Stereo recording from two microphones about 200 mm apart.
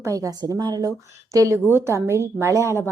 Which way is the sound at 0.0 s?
15° right (ahead or behind).